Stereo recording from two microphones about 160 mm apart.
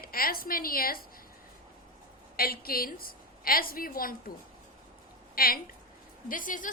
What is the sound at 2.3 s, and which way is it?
A woman's voice, 70° left (ahead or behind).